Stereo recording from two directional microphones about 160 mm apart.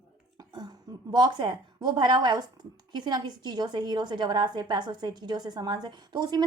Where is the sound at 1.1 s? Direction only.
25° right (ahead or behind).